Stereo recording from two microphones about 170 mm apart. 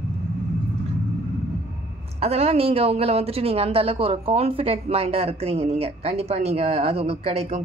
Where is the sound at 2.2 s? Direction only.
35° right (ahead or behind).